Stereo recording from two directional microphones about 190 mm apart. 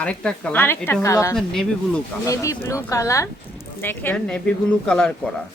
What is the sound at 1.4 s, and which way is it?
Speech, 5° left (ahead or behind).